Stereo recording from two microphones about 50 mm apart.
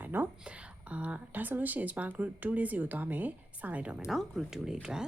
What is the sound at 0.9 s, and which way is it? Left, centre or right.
Speech, right.